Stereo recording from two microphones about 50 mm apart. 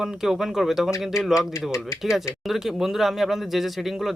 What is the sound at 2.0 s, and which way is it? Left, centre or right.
A man's voice, centre.